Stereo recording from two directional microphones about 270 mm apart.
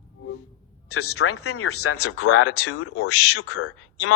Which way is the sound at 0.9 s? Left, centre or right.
Left.